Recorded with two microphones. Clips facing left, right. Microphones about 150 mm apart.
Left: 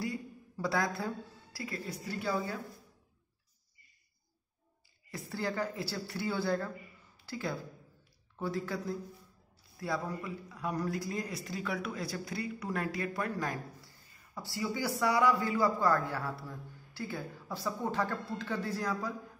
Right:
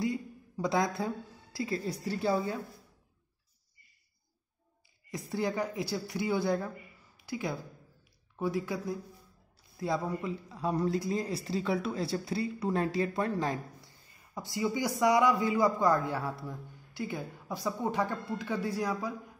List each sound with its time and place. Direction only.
0.0 s a woman's voice: 20° right (ahead or behind)
5.1 s a man's voice: 15° right (ahead or behind)